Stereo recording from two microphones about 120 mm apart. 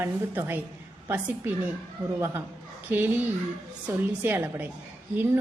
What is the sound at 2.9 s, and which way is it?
Speech, 15° right (ahead or behind).